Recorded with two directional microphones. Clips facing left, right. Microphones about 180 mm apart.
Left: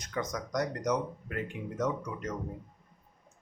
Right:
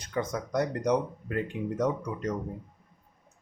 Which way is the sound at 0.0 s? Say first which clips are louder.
Right 4 dB; 30° right (ahead or behind).